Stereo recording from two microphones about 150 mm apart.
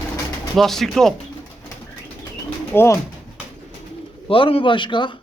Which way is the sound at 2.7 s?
15° left (ahead or behind).